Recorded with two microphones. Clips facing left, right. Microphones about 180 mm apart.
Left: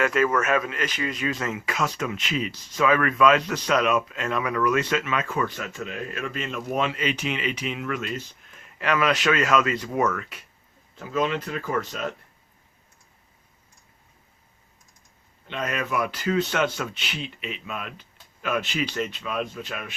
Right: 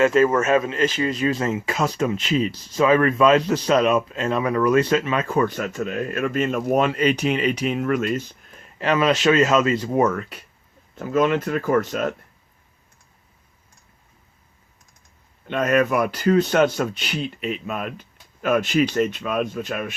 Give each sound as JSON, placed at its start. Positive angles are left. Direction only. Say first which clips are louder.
{"t": 0.0, "sound": "speech", "louder": "right 6 dB", "side_deg": -30}
{"t": 10.9, "sound": "speech", "louder": "right 6 dB", "side_deg": -50}
{"t": 15.4, "sound": "speech", "louder": "right 10 dB", "side_deg": -50}